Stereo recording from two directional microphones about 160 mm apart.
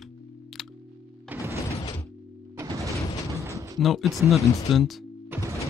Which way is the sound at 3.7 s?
Centre (ahead or behind).